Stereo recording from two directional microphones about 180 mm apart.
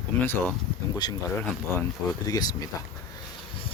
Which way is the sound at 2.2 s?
20° left (ahead or behind).